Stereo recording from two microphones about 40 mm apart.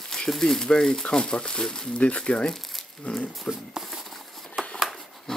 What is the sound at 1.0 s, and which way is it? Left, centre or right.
Speech, left.